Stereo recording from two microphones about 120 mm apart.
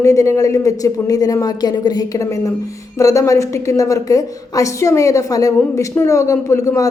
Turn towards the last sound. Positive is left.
turn(degrees=25)  # may be behind; listen again after turning